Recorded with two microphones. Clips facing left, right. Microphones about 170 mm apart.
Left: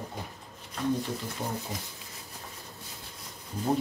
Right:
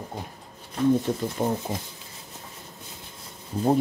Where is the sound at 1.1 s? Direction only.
50° right (ahead or behind).